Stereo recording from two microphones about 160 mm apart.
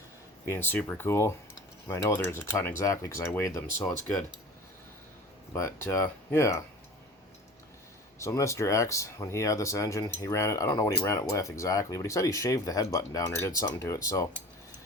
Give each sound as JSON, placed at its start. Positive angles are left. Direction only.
{"t": 0.5, "sound": "speech", "side_deg": 10}
{"t": 5.5, "sound": "speech", "side_deg": 15}
{"t": 8.2, "sound": "speech", "side_deg": 20}